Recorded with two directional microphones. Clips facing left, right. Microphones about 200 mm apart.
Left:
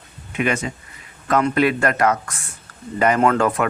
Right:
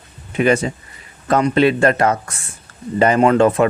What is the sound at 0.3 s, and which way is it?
Speech, 35° right (ahead or behind).